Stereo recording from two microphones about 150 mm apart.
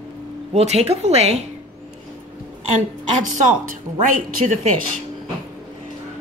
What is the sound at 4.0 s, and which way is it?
Speech, 60° right (ahead or behind).